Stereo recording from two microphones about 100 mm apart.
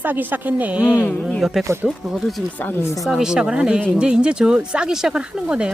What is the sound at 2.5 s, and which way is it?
Speech, 20° left (ahead or behind).